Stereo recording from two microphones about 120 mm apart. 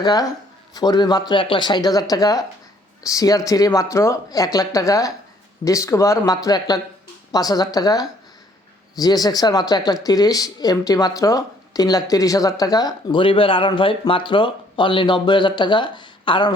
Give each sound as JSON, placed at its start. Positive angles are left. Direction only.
{"t": 0.0, "sound": "speech", "side_deg": 30}